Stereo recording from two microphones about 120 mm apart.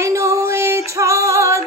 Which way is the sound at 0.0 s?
25° right (ahead or behind).